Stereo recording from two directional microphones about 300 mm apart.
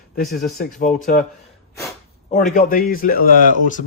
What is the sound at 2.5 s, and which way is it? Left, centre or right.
Speech, left.